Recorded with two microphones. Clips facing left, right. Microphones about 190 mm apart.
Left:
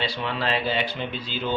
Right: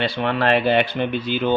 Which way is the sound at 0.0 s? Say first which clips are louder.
Right 7 dB; 60° right (ahead or behind).